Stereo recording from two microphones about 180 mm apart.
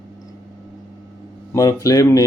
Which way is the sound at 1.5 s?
20° left (ahead or behind).